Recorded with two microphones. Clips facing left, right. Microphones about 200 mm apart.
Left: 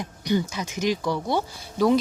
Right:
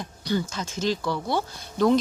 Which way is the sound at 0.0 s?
15° left (ahead or behind).